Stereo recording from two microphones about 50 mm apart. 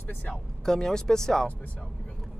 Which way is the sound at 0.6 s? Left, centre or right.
Centre.